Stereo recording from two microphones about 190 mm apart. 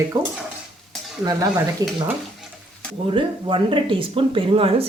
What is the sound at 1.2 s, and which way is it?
Speech, 20° right (ahead or behind).